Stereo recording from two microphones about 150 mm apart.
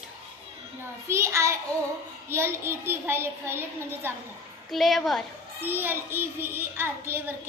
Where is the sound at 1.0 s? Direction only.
20° right (ahead or behind).